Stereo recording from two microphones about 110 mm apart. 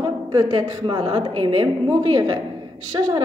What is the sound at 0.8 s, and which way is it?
Speech, 50° right (ahead or behind).